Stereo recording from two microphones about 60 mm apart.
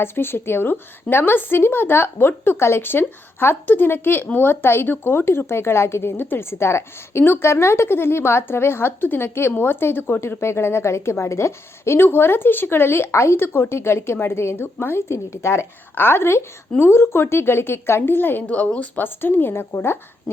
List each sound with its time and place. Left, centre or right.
0.0 s a woman's voice: left
13.7 s a woman's voice: left
16.0 s a woman's voice: left
18.4 s a woman's voice: left
19.0 s a woman's voice: left